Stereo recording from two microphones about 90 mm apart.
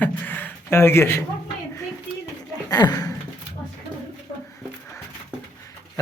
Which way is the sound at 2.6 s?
50° left (ahead or behind).